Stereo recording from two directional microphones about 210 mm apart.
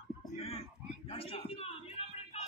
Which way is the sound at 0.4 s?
30° left (ahead or behind).